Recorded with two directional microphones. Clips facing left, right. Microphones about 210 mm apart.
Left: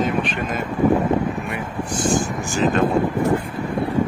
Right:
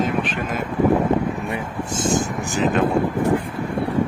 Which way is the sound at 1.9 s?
20° right (ahead or behind).